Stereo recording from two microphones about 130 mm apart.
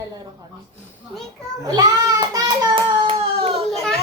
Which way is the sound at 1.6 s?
30° right (ahead or behind).